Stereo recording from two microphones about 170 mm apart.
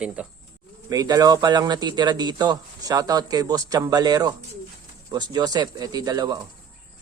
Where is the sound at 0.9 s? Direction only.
25° right (ahead or behind).